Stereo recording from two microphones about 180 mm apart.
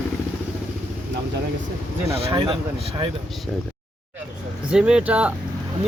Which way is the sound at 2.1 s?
30° right (ahead or behind).